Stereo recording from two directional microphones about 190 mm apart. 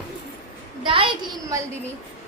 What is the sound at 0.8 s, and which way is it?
Speech, 30° right (ahead or behind).